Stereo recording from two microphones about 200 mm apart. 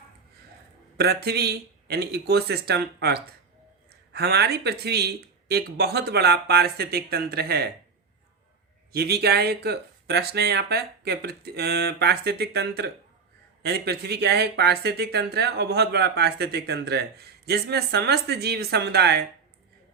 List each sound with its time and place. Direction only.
0.9 s speech: 50° right (ahead or behind)
8.9 s speech: 50° right (ahead or behind)